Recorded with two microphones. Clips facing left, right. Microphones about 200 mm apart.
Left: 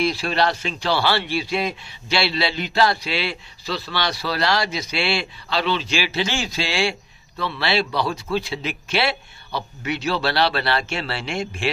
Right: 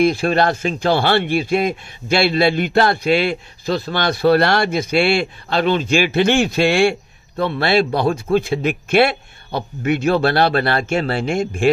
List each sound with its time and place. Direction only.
0.0 s speech: 50° right (ahead or behind)